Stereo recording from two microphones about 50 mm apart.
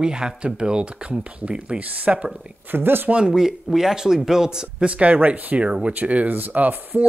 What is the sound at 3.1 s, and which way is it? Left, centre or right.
Speech, centre.